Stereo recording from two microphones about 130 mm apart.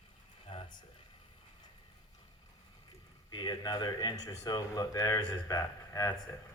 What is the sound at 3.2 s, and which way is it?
Speech, 35° left (ahead or behind).